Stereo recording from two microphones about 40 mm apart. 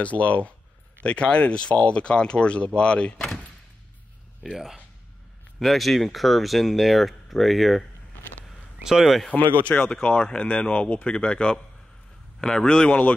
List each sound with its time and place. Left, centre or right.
0.0 s speech: left
4.4 s speech: centre
8.8 s speech: centre
9.7 s speech: left
12.4 s speech: centre
12.6 s speech: left